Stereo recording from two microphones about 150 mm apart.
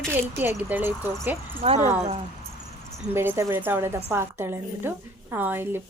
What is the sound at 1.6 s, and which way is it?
Speech, 45° right (ahead or behind).